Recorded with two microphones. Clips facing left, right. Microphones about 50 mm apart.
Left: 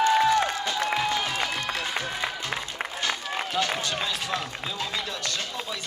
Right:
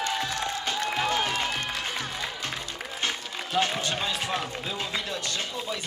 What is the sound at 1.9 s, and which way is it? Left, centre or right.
Music, left.